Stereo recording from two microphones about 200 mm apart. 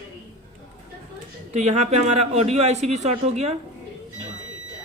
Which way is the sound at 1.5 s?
35° right (ahead or behind).